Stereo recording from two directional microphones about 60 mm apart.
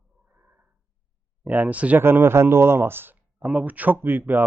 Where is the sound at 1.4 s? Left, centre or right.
Right.